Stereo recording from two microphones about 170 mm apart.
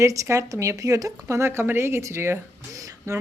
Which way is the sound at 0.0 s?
20° right (ahead or behind).